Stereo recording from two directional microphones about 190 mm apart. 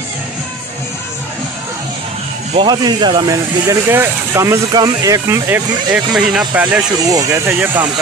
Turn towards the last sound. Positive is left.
turn(degrees=-10)  # may be behind; listen again after turning